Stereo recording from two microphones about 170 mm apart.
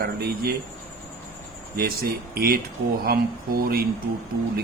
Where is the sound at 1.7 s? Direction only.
65° right (ahead or behind).